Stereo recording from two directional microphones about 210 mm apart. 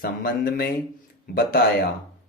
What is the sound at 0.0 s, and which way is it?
Speech, 45° left (ahead or behind).